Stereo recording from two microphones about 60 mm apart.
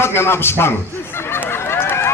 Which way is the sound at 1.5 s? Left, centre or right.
Left.